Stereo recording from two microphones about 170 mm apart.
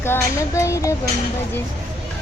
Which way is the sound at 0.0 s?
15° left (ahead or behind).